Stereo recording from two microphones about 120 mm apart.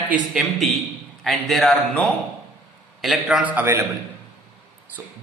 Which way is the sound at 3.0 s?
5° right (ahead or behind).